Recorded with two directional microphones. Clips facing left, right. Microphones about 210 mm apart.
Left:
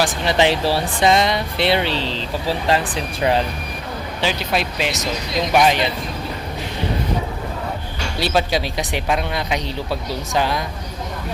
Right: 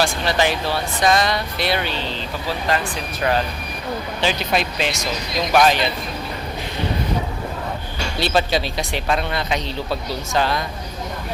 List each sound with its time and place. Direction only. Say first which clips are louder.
0.0 s speech: left 2 dB; 20° left (ahead or behind)
4.2 s speech: even; 5° left (ahead or behind)
8.2 s speech: even; 10° left (ahead or behind)